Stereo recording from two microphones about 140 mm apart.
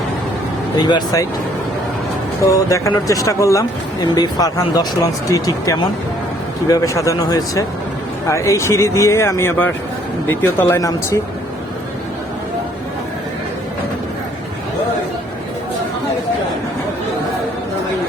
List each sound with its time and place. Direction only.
0.8 s speech: 30° left (ahead or behind)
2.5 s speech: 25° left (ahead or behind)